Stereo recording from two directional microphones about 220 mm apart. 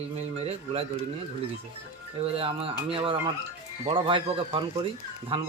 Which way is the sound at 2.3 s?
25° right (ahead or behind).